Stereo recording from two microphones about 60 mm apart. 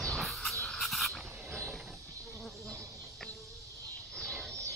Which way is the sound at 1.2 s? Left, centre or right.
Right.